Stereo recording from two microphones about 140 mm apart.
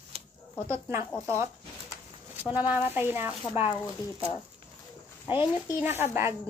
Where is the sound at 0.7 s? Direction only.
20° right (ahead or behind).